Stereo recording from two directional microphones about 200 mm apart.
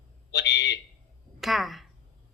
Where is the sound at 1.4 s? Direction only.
Centre (ahead or behind).